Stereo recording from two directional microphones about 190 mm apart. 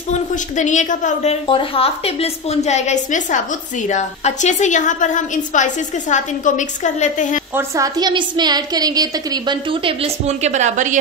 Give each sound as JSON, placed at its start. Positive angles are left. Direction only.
{"t": 0.1, "sound": "a woman's voice", "side_deg": 40}
{"t": 7.5, "sound": "a woman's voice", "side_deg": -15}